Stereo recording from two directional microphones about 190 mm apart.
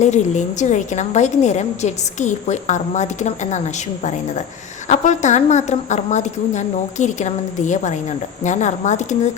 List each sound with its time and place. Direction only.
0.0 s a woman's voice: 40° left (ahead or behind)
4.9 s a woman's voice: 40° left (ahead or behind)